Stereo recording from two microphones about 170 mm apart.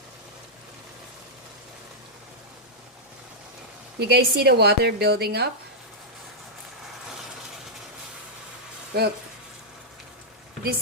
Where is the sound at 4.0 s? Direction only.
70° right (ahead or behind).